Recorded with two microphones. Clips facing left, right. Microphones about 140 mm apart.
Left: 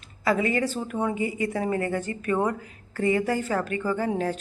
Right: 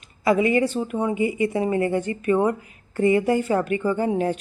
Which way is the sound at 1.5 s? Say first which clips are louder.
Right 4 dB; 15° right (ahead or behind).